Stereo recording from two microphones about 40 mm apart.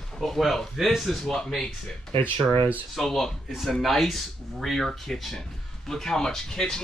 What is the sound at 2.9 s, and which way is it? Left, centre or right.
Speech, centre.